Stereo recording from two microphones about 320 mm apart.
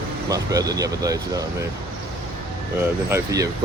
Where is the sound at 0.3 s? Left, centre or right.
Centre.